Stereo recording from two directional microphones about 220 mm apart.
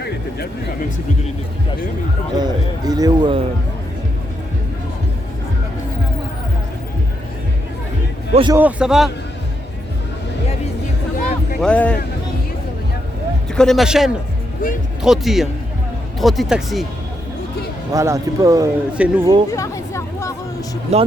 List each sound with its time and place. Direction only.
2.4 s a man's voice: 20° right (ahead or behind)
8.3 s a man's voice: 25° right (ahead or behind)
8.5 s speech: 5° right (ahead or behind)
11.6 s speech: 5° left (ahead or behind)
13.6 s speech: centre (ahead or behind)
17.9 s speech: 15° right (ahead or behind)
19.5 s chatter: 15° left (ahead or behind)
20.9 s a man's voice: 30° right (ahead or behind)